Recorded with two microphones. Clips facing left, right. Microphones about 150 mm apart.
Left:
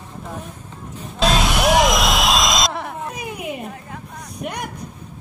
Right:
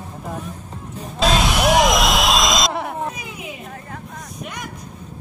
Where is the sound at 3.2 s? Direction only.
60° left (ahead or behind).